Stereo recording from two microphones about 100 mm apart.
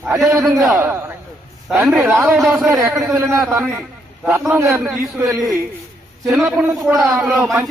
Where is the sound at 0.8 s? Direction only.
20° right (ahead or behind).